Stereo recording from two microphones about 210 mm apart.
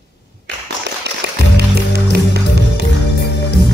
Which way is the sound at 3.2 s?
50° left (ahead or behind).